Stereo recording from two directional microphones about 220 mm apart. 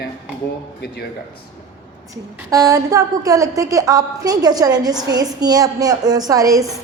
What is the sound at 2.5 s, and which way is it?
A woman's voice, 15° right (ahead or behind).